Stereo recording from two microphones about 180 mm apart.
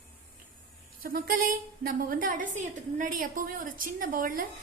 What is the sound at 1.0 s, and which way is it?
A woman's voice, 55° right (ahead or behind).